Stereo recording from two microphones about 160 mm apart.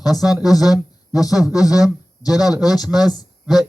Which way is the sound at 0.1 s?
Centre (ahead or behind).